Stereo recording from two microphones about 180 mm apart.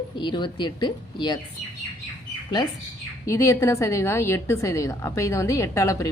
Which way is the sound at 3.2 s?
15° left (ahead or behind).